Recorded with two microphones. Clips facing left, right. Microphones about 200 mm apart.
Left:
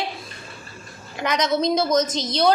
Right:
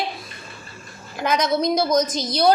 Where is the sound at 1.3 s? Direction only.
20° left (ahead or behind).